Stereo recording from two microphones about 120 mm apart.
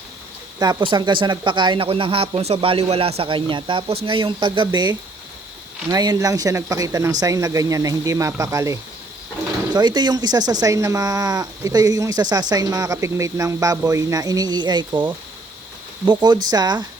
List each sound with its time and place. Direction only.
0.6 s speech: 40° right (ahead or behind)
9.7 s speech: 35° right (ahead or behind)